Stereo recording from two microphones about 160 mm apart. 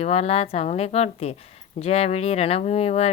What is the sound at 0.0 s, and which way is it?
Speech, 40° left (ahead or behind).